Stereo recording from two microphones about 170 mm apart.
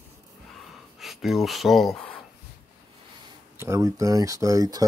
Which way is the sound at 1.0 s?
Centre (ahead or behind).